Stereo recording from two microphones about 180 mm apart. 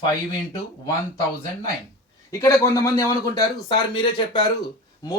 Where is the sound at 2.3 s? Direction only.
15° left (ahead or behind).